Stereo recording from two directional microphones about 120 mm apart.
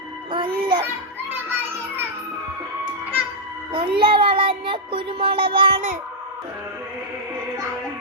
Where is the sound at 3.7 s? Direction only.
45° right (ahead or behind).